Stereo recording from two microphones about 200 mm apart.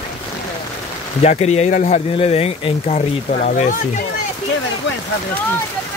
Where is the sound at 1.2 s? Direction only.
35° left (ahead or behind).